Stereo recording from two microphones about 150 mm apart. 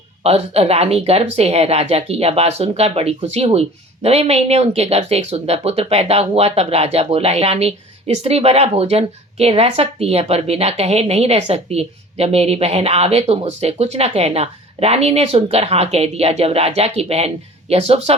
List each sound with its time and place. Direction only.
0.2 s a woman's voice: 45° right (ahead or behind)